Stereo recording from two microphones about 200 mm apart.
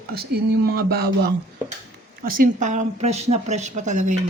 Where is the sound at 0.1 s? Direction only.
50° right (ahead or behind).